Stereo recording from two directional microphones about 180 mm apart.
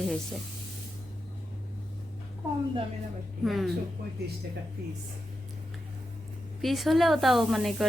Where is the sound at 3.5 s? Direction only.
Centre (ahead or behind).